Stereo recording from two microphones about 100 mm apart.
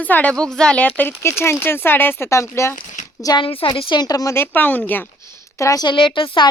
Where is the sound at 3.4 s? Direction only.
65° left (ahead or behind).